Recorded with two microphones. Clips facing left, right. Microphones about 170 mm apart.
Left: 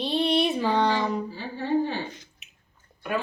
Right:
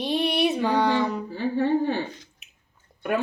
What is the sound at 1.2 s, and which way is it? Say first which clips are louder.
Speech: right 6 dB; 60° right (ahead or behind).